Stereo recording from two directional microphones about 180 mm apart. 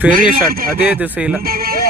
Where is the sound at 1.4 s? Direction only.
55° right (ahead or behind).